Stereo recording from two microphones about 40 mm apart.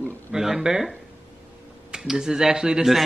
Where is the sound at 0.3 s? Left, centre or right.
Centre.